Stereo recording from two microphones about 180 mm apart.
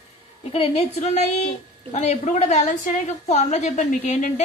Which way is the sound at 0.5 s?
35° left (ahead or behind).